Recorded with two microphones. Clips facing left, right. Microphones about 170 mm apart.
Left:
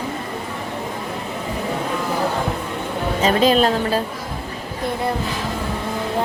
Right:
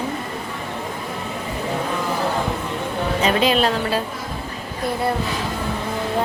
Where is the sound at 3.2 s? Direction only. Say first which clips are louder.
Left 3 dB; 40° left (ahead or behind).